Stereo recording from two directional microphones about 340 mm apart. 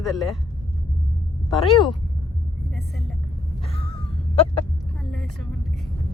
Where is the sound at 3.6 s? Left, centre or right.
Centre.